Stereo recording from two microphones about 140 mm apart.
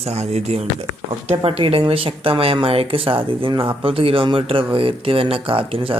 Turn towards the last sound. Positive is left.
turn(degrees=-40)  # may be behind; listen again after turning